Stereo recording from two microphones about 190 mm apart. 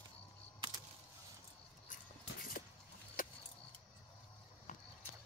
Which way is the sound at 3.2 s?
45° left (ahead or behind).